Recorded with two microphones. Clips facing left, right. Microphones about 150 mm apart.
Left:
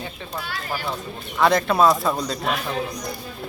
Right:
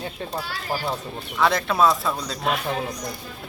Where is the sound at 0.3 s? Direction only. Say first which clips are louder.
Even; 30° right (ahead or behind).